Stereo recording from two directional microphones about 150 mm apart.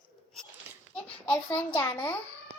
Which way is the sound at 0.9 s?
10° left (ahead or behind).